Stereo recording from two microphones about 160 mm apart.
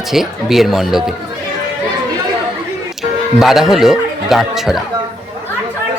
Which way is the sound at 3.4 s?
Centre (ahead or behind).